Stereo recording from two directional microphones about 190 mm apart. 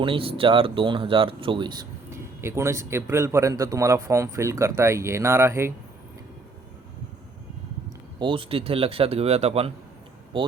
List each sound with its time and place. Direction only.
0.0 s speech: 30° right (ahead or behind)
8.2 s speech: 25° right (ahead or behind)